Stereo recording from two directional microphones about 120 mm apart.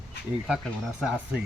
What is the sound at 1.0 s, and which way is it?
Speech, 5° right (ahead or behind).